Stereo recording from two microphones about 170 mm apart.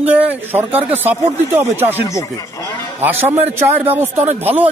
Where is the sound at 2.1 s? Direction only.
20° left (ahead or behind).